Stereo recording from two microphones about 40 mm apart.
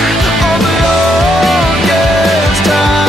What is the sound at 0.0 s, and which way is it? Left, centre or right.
Music, centre.